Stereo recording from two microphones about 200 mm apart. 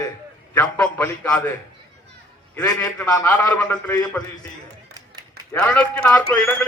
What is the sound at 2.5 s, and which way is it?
A man's voice, 10° left (ahead or behind).